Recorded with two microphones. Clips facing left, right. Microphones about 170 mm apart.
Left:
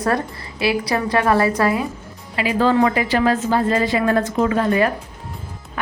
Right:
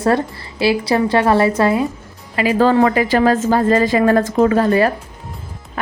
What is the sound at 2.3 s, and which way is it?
A woman's voice, 45° right (ahead or behind).